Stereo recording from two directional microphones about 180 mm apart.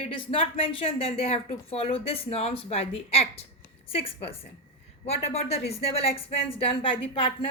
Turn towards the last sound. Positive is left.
turn(degrees=30)  # may be behind; listen again after turning